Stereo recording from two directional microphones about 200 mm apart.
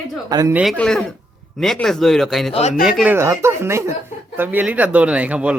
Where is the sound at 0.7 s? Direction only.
5° left (ahead or behind).